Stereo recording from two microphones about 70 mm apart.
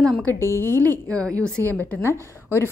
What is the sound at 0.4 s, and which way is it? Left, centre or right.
Speech, left.